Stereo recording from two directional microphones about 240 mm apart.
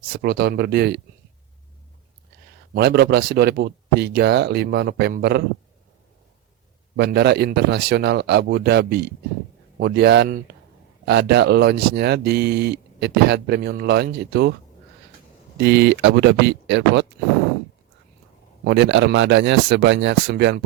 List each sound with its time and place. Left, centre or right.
0.0 s speech: right
2.7 s speech: right
6.9 s speech: right
15.5 s speech: right
18.6 s speech: right